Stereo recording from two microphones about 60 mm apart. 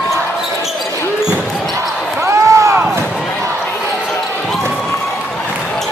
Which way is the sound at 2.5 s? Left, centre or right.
Right.